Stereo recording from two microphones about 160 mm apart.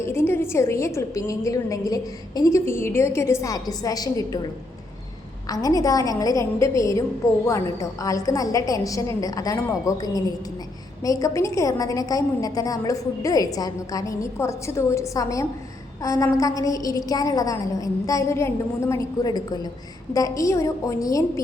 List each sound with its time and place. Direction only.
0.0 s a woman's voice: 15° left (ahead or behind)
5.5 s a woman's voice: 20° left (ahead or behind)